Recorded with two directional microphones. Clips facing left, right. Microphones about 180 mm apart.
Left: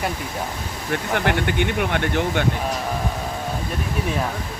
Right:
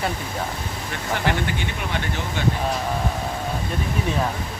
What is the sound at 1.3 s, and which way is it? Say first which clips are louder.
Speech: left 4 dB; 55° left (ahead or behind).